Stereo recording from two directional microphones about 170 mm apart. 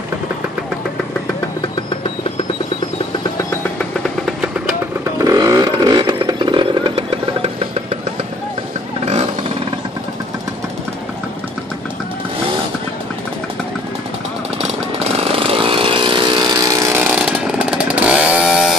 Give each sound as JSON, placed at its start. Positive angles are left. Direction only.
{"t": 5.2, "sound": "chainsaw", "side_deg": -20}
{"t": 9.0, "sound": "a sound", "side_deg": -40}
{"t": 14.6, "sound": "chainsaw", "side_deg": -35}
{"t": 17.0, "sound": "chainsaw", "side_deg": -5}